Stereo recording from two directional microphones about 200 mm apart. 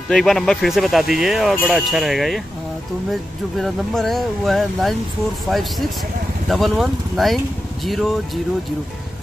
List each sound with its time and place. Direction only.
0.1 s speech: centre (ahead or behind)
3.5 s speech: centre (ahead or behind)